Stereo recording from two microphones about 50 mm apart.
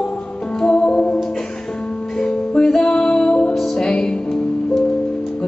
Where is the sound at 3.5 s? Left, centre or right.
Centre.